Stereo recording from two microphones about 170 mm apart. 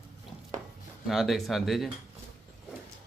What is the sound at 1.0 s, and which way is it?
Speech, centre (ahead or behind).